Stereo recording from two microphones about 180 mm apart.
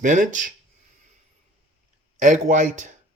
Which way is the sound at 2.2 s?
45° right (ahead or behind).